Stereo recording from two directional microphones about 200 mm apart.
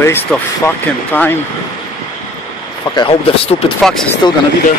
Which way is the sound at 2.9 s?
25° left (ahead or behind).